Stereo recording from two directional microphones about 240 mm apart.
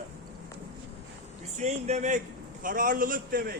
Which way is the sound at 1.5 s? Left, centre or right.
Right.